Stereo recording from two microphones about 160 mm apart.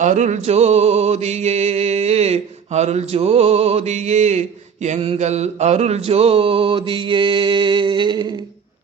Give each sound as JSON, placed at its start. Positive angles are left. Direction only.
{"t": 0.0, "sound": "music", "side_deg": -50}